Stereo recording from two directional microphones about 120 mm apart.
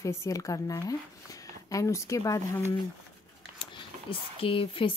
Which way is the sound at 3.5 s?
50° left (ahead or behind).